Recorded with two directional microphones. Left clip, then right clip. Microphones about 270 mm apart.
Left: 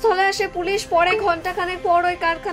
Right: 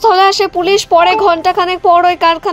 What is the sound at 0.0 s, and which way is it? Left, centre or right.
A woman's voice, right.